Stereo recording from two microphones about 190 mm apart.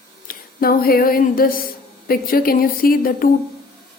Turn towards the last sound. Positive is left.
turn(degrees=50)  # may be behind; listen again after turning